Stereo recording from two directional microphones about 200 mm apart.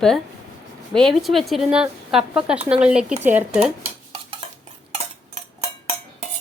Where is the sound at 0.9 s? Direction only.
Centre (ahead or behind).